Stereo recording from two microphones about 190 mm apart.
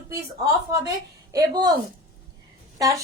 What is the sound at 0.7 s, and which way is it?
A woman's voice, 20° right (ahead or behind).